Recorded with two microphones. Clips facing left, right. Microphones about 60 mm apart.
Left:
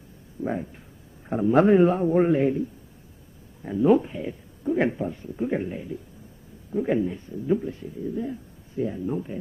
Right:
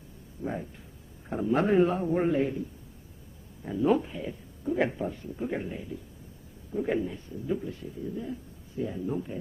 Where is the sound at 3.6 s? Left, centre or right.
Centre.